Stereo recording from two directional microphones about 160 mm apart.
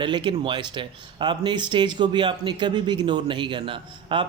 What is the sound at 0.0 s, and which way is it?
Speech, 30° right (ahead or behind).